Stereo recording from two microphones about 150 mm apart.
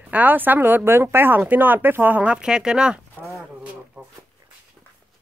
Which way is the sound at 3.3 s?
10° right (ahead or behind).